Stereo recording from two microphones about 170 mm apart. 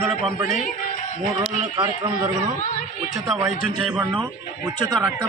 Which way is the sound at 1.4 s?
25° right (ahead or behind).